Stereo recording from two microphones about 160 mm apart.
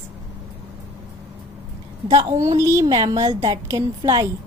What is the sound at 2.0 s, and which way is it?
A woman's voice, 25° right (ahead or behind).